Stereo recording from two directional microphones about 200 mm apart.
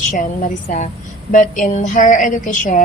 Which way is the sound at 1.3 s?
40° left (ahead or behind).